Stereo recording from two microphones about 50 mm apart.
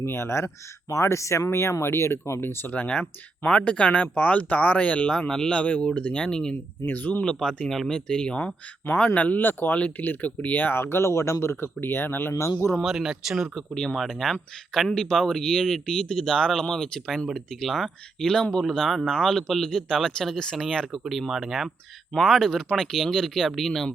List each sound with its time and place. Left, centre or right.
0.0 s speech: left
1.5 s speech: left
2.4 s speech: left
2.7 s speech: left
6.8 s speech: left
7.3 s speech: centre; by 9.4 s left
9.4 s speech: left
10.8 s speech: left
12.3 s speech: left
12.8 s speech: centre
13.7 s speech: centre
20.9 s speech: centre